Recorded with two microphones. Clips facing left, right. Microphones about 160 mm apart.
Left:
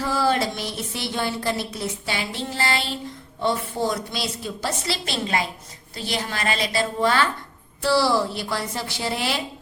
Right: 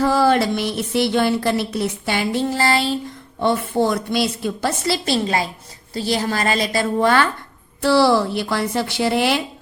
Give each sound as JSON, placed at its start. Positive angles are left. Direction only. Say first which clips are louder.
{"t": 0.0, "sound": "music", "louder": "right 6 dB", "side_deg": -65}
{"t": 3.4, "sound": "music", "louder": "right 5 dB", "side_deg": -60}
{"t": 4.9, "sound": "a woman's voice", "louder": "right 8 dB", "side_deg": -35}
{"t": 7.0, "sound": "music", "louder": "right 4 dB", "side_deg": -55}